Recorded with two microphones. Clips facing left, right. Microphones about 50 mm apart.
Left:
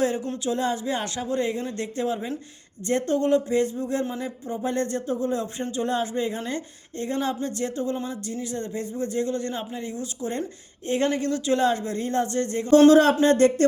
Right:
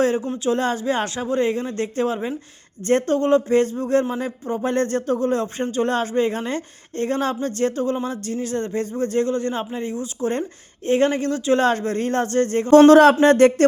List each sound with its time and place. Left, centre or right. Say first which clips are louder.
0.0 s speech: right 5 dB; right
0.5 s speech: right 4 dB; right
9.3 s speech: right 5 dB; right
11.6 s speech: right 4 dB; right
12.9 s speech: right 5 dB; right